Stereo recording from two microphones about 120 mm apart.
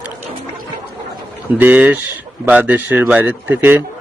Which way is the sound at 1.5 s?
15° right (ahead or behind).